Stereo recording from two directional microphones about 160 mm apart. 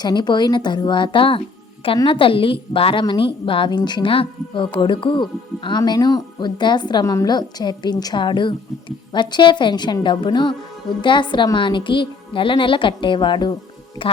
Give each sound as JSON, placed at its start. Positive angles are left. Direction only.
{"t": 0.0, "sound": "a woman's voice", "side_deg": 25}